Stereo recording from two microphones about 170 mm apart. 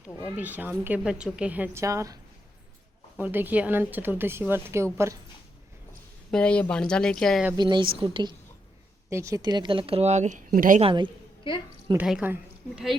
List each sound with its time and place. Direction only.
0.3 s a woman's voice: 10° right (ahead or behind)
3.2 s a woman's voice: 10° right (ahead or behind)
6.3 s speech: 5° left (ahead or behind)
7.5 s a woman's voice: 25° right (ahead or behind)
9.0 s speech: 15° right (ahead or behind); by 10.8 s 50° right (ahead or behind)
10.8 s speech: 30° right (ahead or behind)
11.5 s a woman's voice: 30° left (ahead or behind)
11.9 s speech: 5° right (ahead or behind)